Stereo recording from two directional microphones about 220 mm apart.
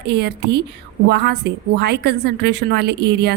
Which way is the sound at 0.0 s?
50° right (ahead or behind).